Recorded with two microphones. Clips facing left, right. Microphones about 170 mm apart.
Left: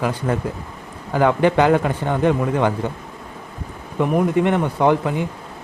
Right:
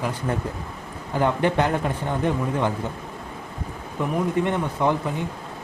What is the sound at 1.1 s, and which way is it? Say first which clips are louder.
A man's voice: left 5 dB; 90° left.